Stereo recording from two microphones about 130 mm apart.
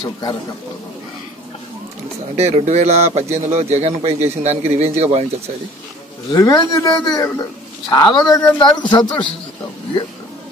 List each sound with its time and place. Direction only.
0.0 s speech: 35° left (ahead or behind)
2.3 s speech: 55° right (ahead or behind)
6.3 s a man's voice: 30° left (ahead or behind)